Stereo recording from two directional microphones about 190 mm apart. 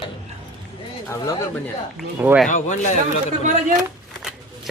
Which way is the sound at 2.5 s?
40° left (ahead or behind).